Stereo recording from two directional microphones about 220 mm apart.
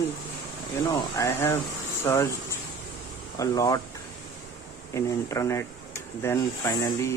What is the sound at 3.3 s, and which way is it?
Speech, 15° left (ahead or behind).